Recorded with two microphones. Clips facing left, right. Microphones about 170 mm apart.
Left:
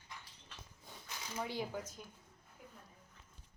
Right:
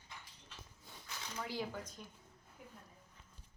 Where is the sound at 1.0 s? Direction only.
20° left (ahead or behind).